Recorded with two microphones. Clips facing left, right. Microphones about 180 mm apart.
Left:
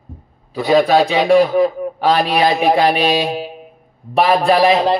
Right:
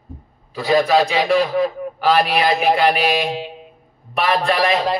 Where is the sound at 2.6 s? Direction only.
30° left (ahead or behind).